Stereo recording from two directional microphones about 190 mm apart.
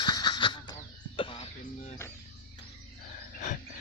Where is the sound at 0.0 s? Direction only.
20° left (ahead or behind).